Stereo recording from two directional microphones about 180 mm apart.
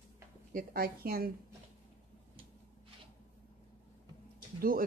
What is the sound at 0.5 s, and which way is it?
Speech, 55° right (ahead or behind).